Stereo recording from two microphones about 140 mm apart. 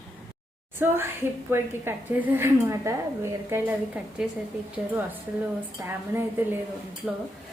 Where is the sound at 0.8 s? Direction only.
15° right (ahead or behind).